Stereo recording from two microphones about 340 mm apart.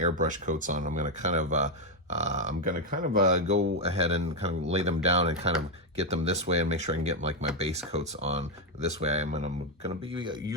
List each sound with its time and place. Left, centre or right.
0.0 s speech: right